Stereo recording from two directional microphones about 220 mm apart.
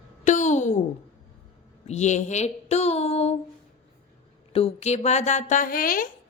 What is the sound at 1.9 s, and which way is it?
Speech, 30° left (ahead or behind).